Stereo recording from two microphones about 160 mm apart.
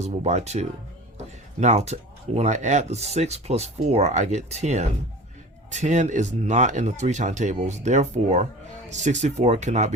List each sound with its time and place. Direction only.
0.0 s speech: 45° right (ahead or behind)